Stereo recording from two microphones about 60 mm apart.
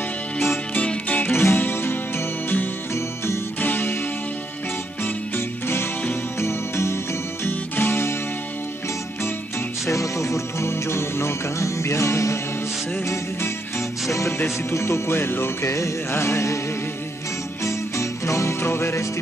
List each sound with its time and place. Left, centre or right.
0.7 s music: left
1.3 s music: left
5.0 s music: left
7.4 s music: left
9.8 s music: left
17.6 s music: left
18.6 s music: left